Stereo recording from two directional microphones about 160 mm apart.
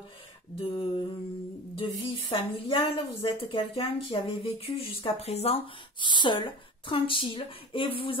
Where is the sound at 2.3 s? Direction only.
35° left (ahead or behind).